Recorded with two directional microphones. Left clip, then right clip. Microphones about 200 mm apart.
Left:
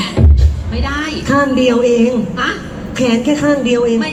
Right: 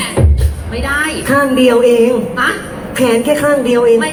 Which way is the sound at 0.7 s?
20° right (ahead or behind).